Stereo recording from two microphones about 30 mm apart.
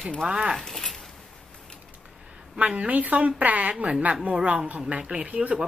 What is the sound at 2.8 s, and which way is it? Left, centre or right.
A woman's voice, right.